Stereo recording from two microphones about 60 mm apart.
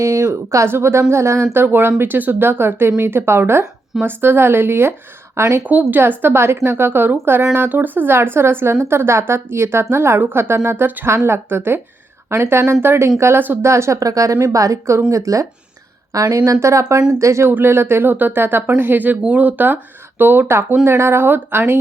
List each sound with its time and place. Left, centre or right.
0.0 s speech: right
0.7 s speech: right
1.5 s speech: right
5.9 s speech: right
11.0 s speech: right
13.7 s a woman's voice: right
16.1 s speech: right
16.5 s a woman's voice: right
17.5 s speech: right